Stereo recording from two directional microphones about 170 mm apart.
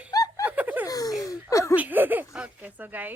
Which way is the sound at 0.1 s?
20° left (ahead or behind).